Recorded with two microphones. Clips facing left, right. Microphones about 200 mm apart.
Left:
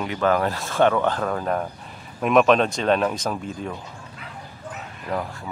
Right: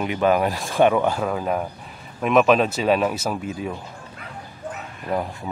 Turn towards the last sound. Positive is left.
turn(degrees=-20)  # may be behind; listen again after turning